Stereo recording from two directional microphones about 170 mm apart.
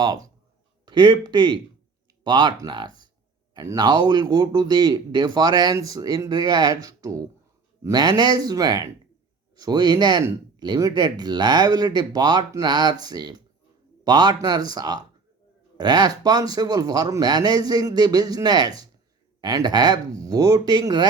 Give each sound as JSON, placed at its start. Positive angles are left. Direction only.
{"t": 0.0, "sound": "speech", "side_deg": -20}